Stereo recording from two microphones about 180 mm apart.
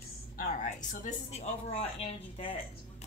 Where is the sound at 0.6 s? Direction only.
40° left (ahead or behind).